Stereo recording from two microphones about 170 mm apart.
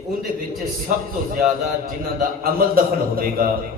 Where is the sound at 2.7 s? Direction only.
60° right (ahead or behind).